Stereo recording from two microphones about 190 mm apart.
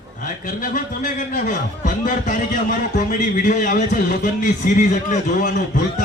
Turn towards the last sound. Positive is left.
turn(degrees=45)  # may be behind; listen again after turning